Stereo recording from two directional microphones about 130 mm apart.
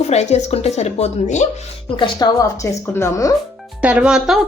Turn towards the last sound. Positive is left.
turn(degrees=-5)  # may be behind; listen again after turning